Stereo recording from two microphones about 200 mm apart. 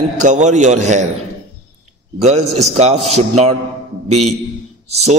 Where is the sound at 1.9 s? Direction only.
35° right (ahead or behind).